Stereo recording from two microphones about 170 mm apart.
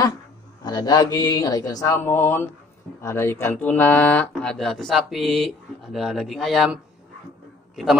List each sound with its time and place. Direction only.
0.7 s a man's voice: 20° left (ahead or behind); by 8.0 s centre (ahead or behind)